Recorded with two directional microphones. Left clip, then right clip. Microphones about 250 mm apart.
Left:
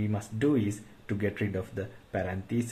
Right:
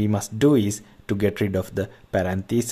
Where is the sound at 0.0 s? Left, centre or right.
Right.